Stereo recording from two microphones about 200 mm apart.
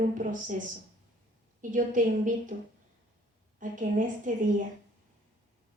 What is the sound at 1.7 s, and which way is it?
Speech, 40° right (ahead or behind).